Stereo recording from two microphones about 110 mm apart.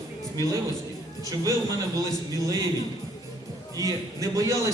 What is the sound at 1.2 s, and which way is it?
Speech, 30° right (ahead or behind).